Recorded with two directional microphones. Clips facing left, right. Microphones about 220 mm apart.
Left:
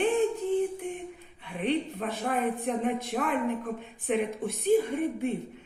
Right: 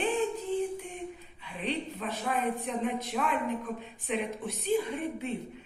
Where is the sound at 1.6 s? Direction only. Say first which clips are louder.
Left 5 dB; 50° left (ahead or behind).